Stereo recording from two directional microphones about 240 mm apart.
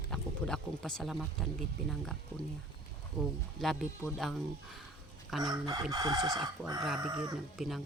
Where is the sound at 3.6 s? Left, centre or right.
Centre.